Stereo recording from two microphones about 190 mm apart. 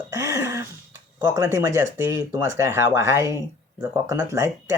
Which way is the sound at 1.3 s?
15° right (ahead or behind).